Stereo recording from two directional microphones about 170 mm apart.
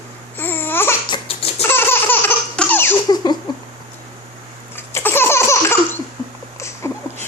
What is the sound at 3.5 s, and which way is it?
Cat, 25° left (ahead or behind).